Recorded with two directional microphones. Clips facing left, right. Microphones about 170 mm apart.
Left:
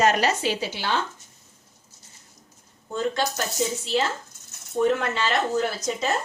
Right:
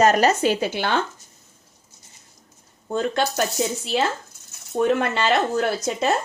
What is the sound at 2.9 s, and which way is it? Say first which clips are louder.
Speech: right 3 dB; 60° right (ahead or behind).